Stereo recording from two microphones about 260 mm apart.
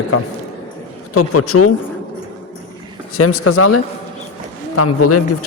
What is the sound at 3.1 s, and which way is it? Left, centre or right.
A man's voice, left.